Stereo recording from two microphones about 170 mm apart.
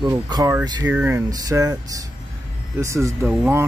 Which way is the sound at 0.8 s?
10° right (ahead or behind).